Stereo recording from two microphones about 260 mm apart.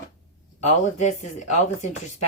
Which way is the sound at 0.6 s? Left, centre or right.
Left.